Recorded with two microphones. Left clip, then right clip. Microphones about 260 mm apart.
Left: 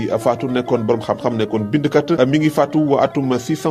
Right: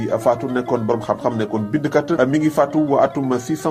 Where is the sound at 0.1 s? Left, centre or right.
Left.